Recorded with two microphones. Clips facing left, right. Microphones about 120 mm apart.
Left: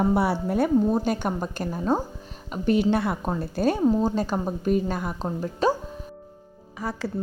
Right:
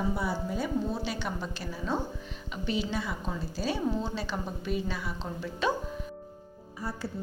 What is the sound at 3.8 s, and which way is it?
A woman's voice, 40° left (ahead or behind).